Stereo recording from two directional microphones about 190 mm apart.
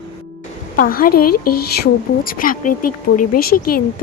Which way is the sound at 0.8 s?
50° left (ahead or behind).